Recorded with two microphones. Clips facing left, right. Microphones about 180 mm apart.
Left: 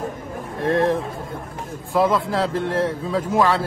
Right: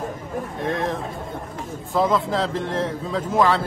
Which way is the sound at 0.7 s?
35° left (ahead or behind).